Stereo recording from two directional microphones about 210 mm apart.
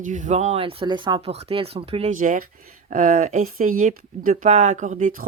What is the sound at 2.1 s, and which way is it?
Speech, 40° right (ahead or behind).